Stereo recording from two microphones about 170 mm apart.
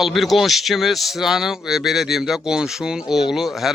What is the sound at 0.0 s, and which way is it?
Speech, centre (ahead or behind).